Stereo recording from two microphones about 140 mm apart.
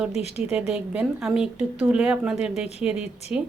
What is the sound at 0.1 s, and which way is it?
Speech, 50° left (ahead or behind).